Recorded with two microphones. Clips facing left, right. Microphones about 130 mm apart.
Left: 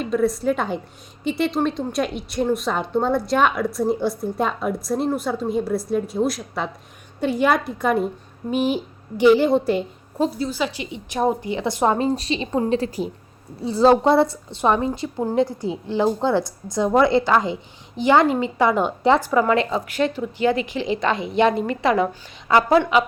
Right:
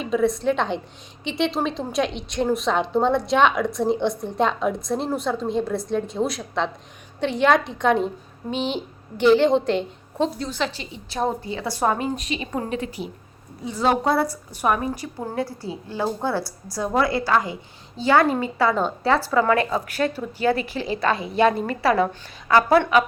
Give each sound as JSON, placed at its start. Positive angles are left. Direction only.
{"t": 0.0, "sound": "a woman's voice", "side_deg": 0}
{"t": 11.9, "sound": "a woman's voice", "side_deg": 35}